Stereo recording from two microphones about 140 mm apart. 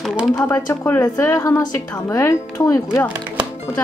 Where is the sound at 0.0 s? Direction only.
5° right (ahead or behind).